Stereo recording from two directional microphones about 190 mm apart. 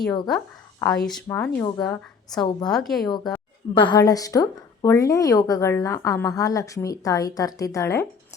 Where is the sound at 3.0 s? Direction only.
20° left (ahead or behind).